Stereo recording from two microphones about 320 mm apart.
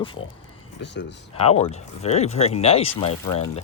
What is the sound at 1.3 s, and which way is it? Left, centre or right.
Speech, centre.